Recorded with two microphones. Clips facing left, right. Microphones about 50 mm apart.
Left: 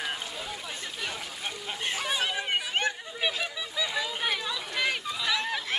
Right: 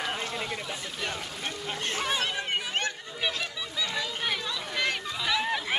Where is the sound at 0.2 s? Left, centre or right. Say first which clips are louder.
Right 4 dB; right.